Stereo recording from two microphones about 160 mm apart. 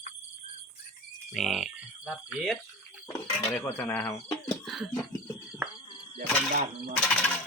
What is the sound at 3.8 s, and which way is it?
Speech, 20° left (ahead or behind).